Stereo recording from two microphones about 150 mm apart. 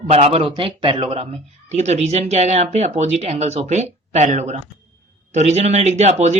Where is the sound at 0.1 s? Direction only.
45° right (ahead or behind).